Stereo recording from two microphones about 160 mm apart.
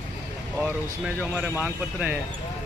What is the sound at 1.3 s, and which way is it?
Speech, 10° right (ahead or behind).